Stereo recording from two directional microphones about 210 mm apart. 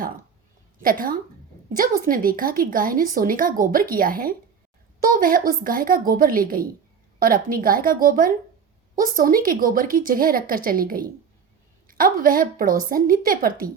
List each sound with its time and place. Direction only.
0.8 s a woman's voice: 40° right (ahead or behind)